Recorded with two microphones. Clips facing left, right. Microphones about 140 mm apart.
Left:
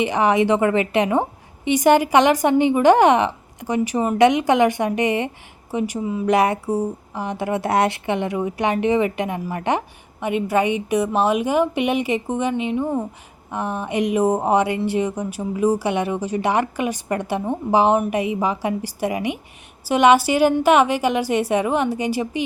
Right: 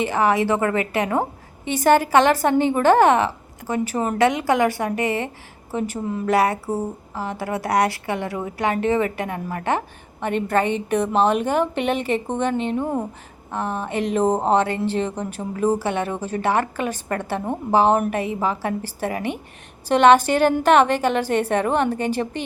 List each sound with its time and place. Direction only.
0.0 s a woman's voice: 20° left (ahead or behind)
6.0 s speech: 5° left (ahead or behind)
6.2 s speech: 20° left (ahead or behind)
12.7 s speech: 5° right (ahead or behind)
13.5 s speech: 15° left (ahead or behind)